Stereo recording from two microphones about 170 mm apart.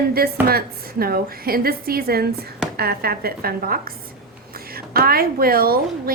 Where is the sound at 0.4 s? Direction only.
60° right (ahead or behind).